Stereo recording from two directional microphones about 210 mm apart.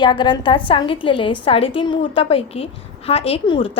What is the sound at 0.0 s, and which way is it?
A woman's voice, 20° left (ahead or behind).